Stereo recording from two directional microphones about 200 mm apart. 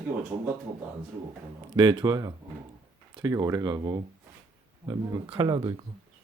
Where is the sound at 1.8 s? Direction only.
25° right (ahead or behind).